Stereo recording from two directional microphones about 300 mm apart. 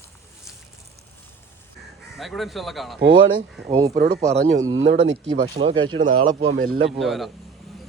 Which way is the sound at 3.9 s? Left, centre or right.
Right.